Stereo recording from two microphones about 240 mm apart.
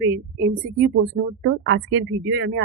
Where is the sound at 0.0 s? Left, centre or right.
Right.